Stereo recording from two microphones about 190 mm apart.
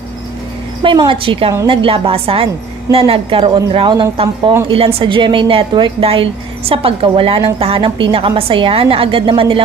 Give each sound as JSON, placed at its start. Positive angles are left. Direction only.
{"t": 0.8, "sound": "a woman's voice", "side_deg": -25}